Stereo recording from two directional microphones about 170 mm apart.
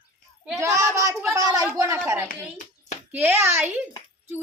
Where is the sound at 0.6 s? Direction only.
20° right (ahead or behind).